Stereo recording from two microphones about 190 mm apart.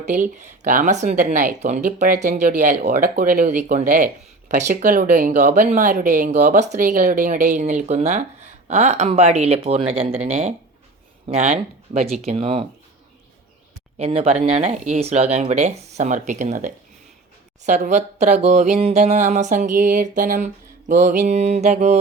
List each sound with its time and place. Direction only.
0.0 s speech: 40° right (ahead or behind)
14.0 s speech: 30° right (ahead or behind)